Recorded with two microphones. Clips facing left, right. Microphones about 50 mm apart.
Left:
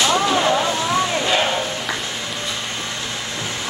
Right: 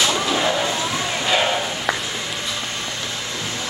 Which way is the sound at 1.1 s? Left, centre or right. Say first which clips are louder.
Left 1 dB; centre.